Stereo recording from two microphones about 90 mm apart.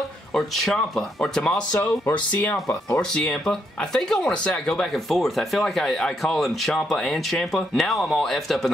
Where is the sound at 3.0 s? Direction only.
10° left (ahead or behind).